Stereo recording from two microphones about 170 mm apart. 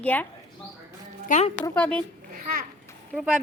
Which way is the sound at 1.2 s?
45° left (ahead or behind).